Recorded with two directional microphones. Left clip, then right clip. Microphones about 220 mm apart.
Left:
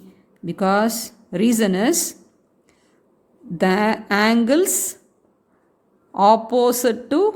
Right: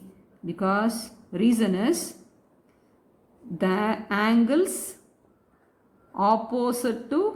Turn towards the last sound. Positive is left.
turn(degrees=40)  # may be behind; listen again after turning